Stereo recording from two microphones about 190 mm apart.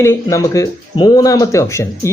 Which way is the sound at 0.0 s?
15° left (ahead or behind).